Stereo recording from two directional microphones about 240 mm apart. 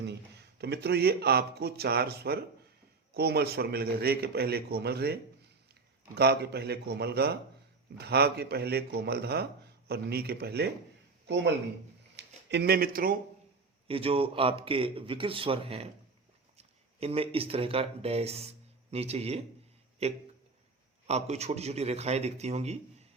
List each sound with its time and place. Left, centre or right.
0.0 s a man's voice: right
13.8 s a man's voice: right